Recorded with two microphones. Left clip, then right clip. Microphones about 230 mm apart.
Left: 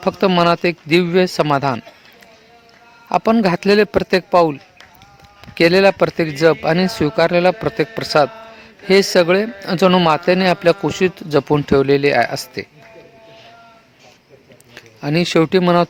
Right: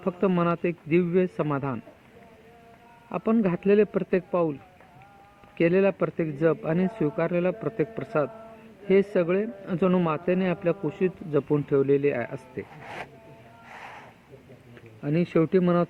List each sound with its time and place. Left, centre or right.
0.0 s a man's voice: left
3.1 s a man's voice: left
5.5 s a man's voice: left
14.8 s speech: left